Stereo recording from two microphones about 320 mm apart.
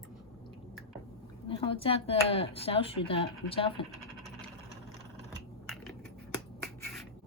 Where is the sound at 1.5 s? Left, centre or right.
Centre.